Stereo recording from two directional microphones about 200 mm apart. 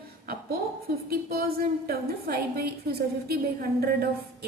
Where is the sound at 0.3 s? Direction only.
50° right (ahead or behind).